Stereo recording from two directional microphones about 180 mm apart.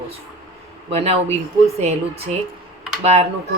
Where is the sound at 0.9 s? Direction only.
35° right (ahead or behind).